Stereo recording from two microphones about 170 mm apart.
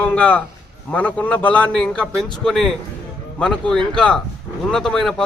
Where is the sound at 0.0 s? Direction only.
10° left (ahead or behind).